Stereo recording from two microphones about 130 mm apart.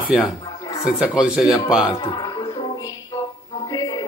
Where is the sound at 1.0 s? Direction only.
5° right (ahead or behind).